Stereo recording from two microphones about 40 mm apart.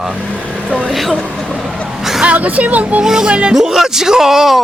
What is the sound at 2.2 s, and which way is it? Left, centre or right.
Speech, right.